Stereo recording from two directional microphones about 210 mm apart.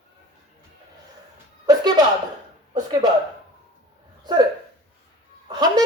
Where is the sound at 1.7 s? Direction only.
20° right (ahead or behind).